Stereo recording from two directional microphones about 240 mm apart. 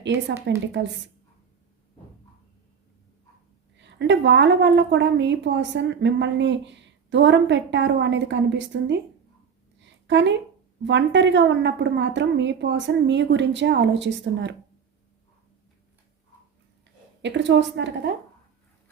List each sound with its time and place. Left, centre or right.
0.0 s a woman's voice: right
3.8 s a woman's voice: right
9.8 s a sound: right
10.8 s a woman's voice: right
17.2 s a woman's voice: right